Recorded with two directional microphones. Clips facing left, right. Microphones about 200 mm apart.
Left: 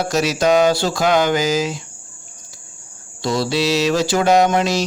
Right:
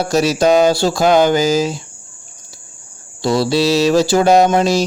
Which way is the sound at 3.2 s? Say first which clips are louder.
Right 4 dB; 30° right (ahead or behind).